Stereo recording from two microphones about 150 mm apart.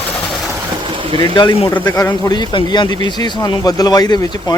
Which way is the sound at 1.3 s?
30° left (ahead or behind).